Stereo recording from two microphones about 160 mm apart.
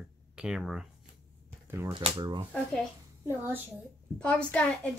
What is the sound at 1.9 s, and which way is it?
Speech, 30° right (ahead or behind).